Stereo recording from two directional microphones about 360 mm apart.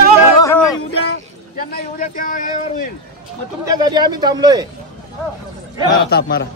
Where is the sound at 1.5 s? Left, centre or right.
Left.